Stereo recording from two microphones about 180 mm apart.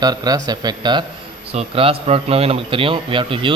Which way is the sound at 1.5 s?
35° right (ahead or behind).